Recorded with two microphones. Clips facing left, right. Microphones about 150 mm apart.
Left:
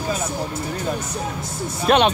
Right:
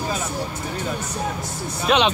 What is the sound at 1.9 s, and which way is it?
Speech, 50° left (ahead or behind).